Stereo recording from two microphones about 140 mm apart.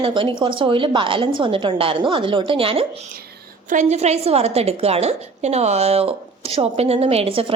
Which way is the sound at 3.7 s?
55° right (ahead or behind).